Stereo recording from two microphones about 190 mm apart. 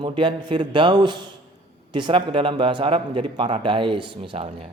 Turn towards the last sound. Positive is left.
turn(degrees=-30)  # may be behind; listen again after turning